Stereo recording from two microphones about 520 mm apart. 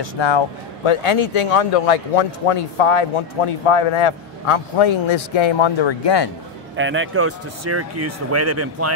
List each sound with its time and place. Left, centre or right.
0.0 s speech: left
0.8 s a man's voice: left
6.8 s speech: right